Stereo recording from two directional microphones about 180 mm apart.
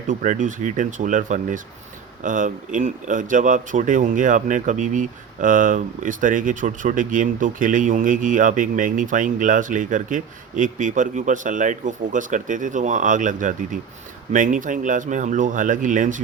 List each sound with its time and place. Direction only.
0.1 s speech: 45° right (ahead or behind)